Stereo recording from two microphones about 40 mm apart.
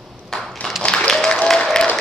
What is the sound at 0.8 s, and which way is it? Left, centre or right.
Applause, centre.